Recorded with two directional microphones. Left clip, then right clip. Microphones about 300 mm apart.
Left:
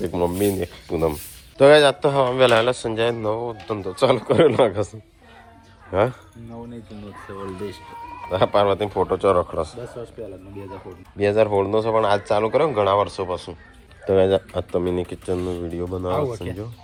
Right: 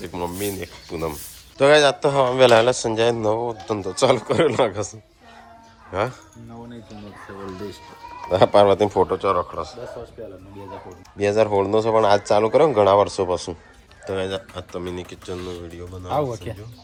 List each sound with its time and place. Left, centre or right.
0.0 s speech: centre
5.9 s speech: centre
8.3 s speech: centre
11.2 s speech: centre
14.1 s speech: centre
16.1 s speech: right